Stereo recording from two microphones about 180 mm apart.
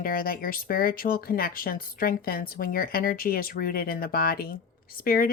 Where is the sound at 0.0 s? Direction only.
55° left (ahead or behind).